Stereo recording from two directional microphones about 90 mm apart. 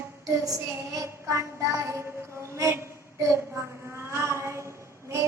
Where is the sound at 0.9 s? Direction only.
35° right (ahead or behind).